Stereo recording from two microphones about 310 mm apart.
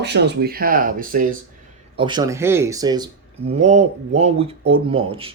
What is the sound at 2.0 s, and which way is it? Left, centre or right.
Speech, centre.